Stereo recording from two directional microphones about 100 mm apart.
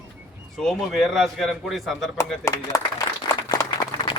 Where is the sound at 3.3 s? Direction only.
35° left (ahead or behind).